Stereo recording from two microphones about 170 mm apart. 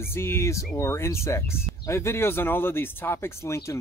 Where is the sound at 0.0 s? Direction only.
15° left (ahead or behind).